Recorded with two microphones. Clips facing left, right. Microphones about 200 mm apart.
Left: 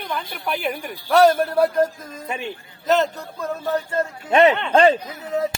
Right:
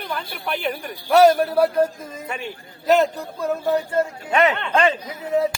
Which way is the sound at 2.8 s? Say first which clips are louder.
Right 2 dB; 10° right (ahead or behind).